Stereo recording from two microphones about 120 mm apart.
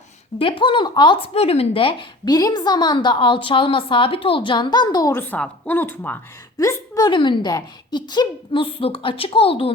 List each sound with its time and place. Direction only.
0.3 s a woman's voice: 45° left (ahead or behind)
1.3 s a woman's voice: 55° left (ahead or behind); by 5.1 s 30° left (ahead or behind)
5.1 s a woman's voice: 15° left (ahead or behind)
6.6 s a woman's voice: 30° left (ahead or behind); by 9.7 s 50° left (ahead or behind)